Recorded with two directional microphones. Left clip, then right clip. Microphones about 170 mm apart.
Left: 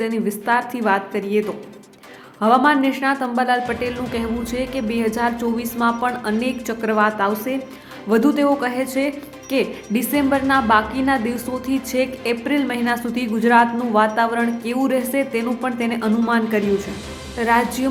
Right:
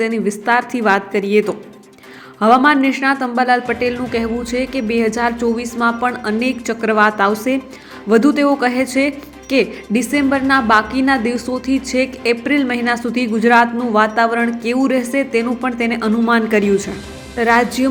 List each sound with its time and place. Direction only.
0.0 s a woman's voice: 15° right (ahead or behind)